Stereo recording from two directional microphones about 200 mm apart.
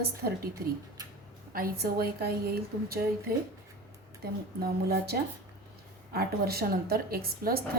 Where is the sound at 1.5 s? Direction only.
50° right (ahead or behind).